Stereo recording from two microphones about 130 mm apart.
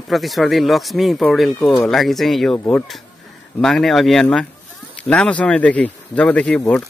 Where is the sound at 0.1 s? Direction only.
Centre (ahead or behind).